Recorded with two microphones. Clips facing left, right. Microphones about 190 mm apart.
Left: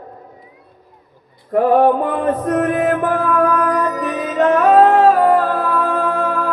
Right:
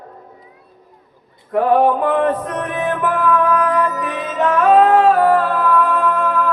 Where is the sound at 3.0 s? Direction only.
40° left (ahead or behind).